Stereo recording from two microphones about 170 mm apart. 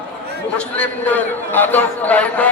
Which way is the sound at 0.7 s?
10° left (ahead or behind).